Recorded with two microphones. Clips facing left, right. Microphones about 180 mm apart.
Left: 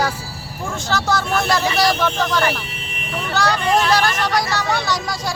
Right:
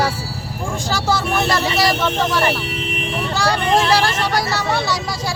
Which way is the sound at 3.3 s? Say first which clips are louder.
Even; 30° right (ahead or behind).